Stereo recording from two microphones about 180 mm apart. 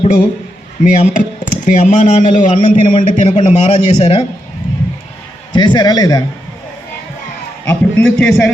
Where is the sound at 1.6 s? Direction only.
45° left (ahead or behind).